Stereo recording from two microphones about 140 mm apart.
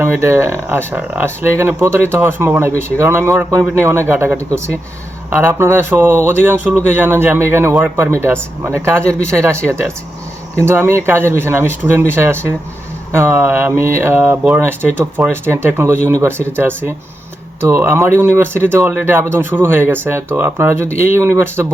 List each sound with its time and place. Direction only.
0.0 s speech: 20° right (ahead or behind)